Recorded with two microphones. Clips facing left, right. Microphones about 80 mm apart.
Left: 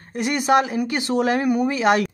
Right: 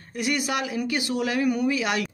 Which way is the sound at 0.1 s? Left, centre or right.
Left.